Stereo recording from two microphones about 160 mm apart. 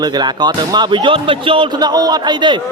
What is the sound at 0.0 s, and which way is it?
Speech, 25° right (ahead or behind).